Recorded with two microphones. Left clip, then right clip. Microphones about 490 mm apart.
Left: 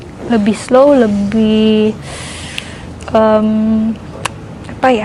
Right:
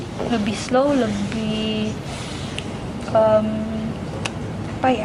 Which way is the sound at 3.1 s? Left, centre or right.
Left.